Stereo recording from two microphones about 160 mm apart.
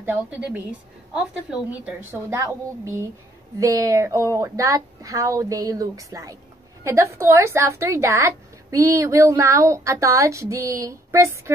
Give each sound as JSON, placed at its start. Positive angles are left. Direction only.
{"t": 0.0, "sound": "a woman's voice", "side_deg": -10}